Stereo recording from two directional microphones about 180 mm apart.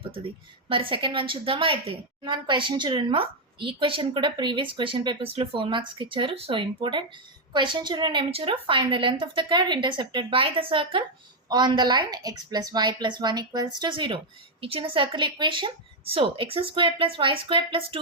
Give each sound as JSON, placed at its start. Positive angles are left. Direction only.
{"t": 0.0, "sound": "a woman's voice", "side_deg": -30}